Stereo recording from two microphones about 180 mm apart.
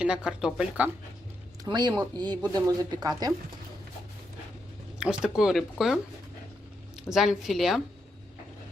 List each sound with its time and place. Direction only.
0.0 s speech: 5° right (ahead or behind)
1.6 s speech: 25° right (ahead or behind)
4.9 s speech: 5° right (ahead or behind)
7.1 s speech: centre (ahead or behind)